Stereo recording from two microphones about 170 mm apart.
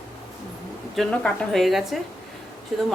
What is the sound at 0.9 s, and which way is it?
A woman's voice, centre (ahead or behind).